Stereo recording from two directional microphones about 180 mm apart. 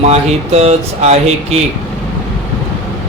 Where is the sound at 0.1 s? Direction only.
35° right (ahead or behind).